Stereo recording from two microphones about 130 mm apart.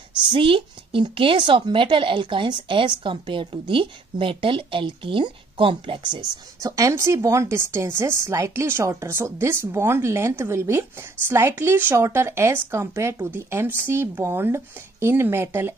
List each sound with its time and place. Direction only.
0.3 s speech: 40° right (ahead or behind)
6.6 s a woman's voice: 25° right (ahead or behind)